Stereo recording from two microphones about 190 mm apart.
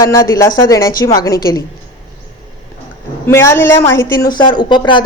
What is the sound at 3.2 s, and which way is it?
A woman's voice, 15° left (ahead or behind).